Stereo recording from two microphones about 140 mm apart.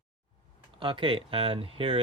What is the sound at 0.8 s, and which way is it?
Speech, 35° right (ahead or behind).